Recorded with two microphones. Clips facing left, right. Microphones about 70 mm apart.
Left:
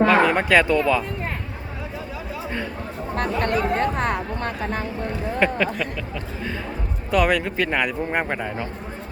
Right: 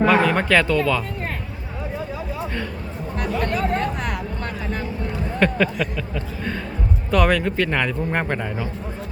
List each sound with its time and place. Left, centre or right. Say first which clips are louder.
0.0 s a sound: even; centre
0.3 s speech: left 1 dB; centre
3.2 s chatter: left 1 dB; left
5.4 s speech: right 1 dB; centre
7.1 s speech: right 1 dB; centre